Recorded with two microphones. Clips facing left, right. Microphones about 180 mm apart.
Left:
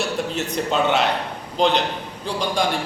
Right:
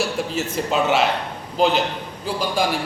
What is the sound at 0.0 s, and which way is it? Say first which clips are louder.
A man's voice: right 1 dB; centre (ahead or behind).